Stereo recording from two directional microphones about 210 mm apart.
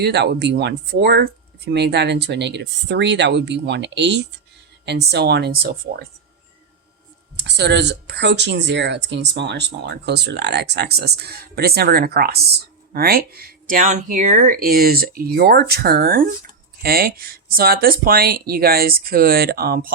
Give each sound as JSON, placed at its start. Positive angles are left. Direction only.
{"t": 0.0, "sound": "speech", "side_deg": -50}
{"t": 7.3, "sound": "speech", "side_deg": -55}